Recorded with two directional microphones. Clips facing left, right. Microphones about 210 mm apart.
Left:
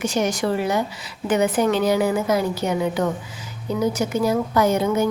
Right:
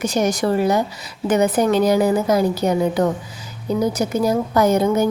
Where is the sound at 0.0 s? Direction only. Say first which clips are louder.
Right 3 dB; 40° right (ahead or behind).